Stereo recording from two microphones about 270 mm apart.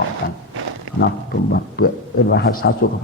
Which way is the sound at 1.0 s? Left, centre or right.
Left.